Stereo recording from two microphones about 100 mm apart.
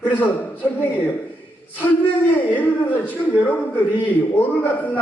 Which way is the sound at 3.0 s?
15° left (ahead or behind).